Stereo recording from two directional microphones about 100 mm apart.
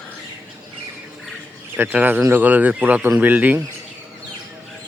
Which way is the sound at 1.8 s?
20° right (ahead or behind).